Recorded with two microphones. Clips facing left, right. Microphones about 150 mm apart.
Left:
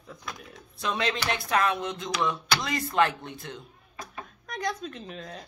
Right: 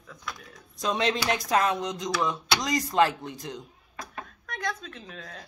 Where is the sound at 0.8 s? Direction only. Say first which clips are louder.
Right 3 dB; 20° right (ahead or behind).